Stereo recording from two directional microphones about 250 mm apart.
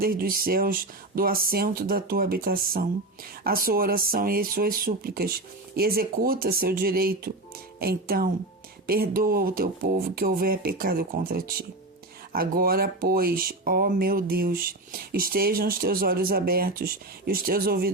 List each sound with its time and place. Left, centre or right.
0.0 s speech: right